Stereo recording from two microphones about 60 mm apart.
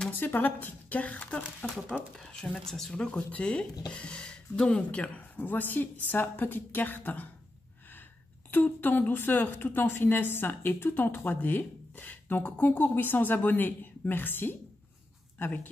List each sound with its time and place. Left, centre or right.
0.1 s speech: left
8.5 s speech: left